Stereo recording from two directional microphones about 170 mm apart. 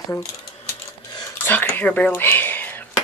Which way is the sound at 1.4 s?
10° left (ahead or behind).